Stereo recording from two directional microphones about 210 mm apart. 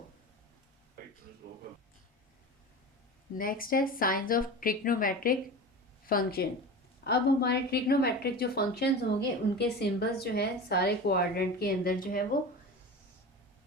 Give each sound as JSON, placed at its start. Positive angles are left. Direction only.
{"t": 1.4, "sound": "speech", "side_deg": -50}
{"t": 3.3, "sound": "a woman's voice", "side_deg": 40}